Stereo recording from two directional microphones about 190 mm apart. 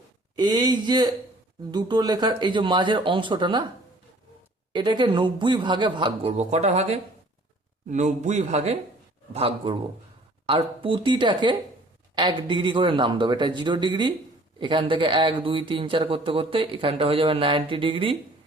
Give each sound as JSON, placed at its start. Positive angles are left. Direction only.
{"t": 0.3, "sound": "speech", "side_deg": -20}
{"t": 4.7, "sound": "speech", "side_deg": -25}
{"t": 6.3, "sound": "speech", "side_deg": -35}